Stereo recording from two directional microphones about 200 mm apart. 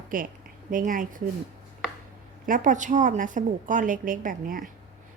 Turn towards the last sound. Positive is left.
turn(degrees=-45)  # may be behind; listen again after turning